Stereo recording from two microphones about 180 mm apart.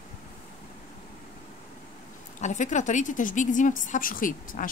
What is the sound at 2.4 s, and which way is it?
A woman's voice, 40° left (ahead or behind).